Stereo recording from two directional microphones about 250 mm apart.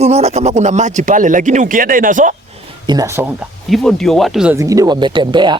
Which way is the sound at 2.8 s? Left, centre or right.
Centre.